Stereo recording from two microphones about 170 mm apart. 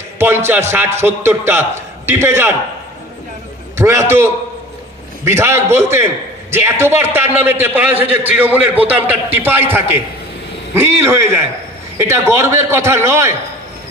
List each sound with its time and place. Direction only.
0.2 s a man's voice: 15° right (ahead or behind)
3.8 s a man's voice: 15° right (ahead or behind)
5.2 s a man's voice: 15° right (ahead or behind)